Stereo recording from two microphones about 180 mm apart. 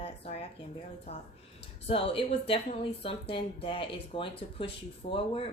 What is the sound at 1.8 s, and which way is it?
A woman's voice, 30° left (ahead or behind).